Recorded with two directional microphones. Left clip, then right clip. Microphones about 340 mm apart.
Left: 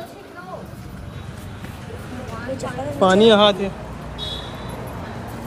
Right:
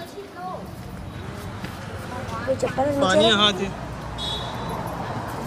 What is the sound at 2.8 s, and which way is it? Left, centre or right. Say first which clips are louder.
Speech: right 9 dB; right.